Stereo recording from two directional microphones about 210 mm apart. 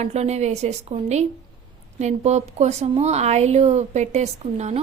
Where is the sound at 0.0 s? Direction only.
30° right (ahead or behind).